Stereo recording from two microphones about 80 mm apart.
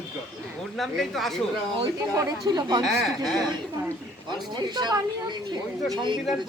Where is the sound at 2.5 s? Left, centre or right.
Right.